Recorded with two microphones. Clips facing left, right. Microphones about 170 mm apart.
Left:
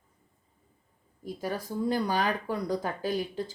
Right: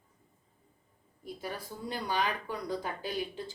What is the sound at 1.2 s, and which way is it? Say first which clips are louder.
Speech: left 6 dB; 40° left (ahead or behind).